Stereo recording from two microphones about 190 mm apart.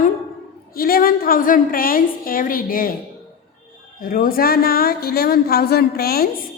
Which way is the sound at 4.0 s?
50° left (ahead or behind).